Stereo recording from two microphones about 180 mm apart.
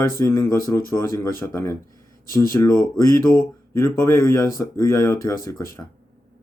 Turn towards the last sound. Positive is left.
turn(degrees=15)  # may be behind; listen again after turning